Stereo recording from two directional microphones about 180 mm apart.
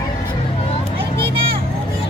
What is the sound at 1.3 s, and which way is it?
Vehicle, 30° right (ahead or behind).